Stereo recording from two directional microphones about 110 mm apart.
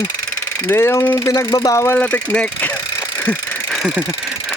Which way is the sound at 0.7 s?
20° left (ahead or behind).